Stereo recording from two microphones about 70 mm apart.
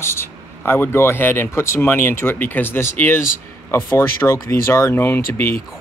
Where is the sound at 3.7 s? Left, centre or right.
Left.